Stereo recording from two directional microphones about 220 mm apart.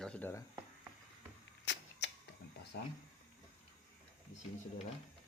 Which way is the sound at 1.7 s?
55° left (ahead or behind).